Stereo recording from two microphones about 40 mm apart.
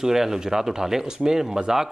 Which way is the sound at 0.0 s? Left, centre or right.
Centre.